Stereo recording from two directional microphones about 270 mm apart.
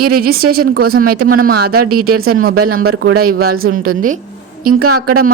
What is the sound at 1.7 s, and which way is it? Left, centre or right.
A man's voice, right.